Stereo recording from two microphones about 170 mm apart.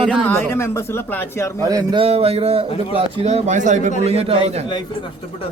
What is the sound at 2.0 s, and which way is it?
Speech, 35° right (ahead or behind).